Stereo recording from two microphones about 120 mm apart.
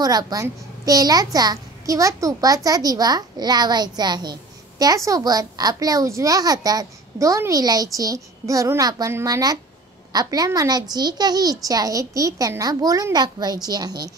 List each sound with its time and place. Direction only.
0.0 s a child's voice: 30° right (ahead or behind)